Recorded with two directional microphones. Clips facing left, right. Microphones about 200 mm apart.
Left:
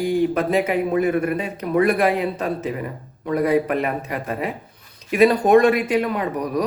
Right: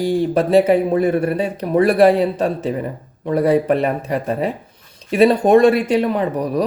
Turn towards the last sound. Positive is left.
turn(degrees=-30)  # may be behind; listen again after turning